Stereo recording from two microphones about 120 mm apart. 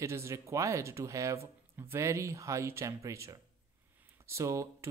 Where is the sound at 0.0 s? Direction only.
25° right (ahead or behind).